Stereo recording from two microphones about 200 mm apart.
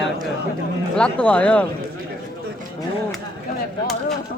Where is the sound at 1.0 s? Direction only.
5° left (ahead or behind).